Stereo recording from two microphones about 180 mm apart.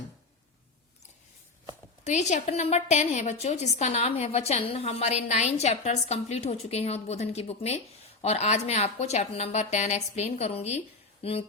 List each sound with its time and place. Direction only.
2.0 s a woman's voice: 40° left (ahead or behind)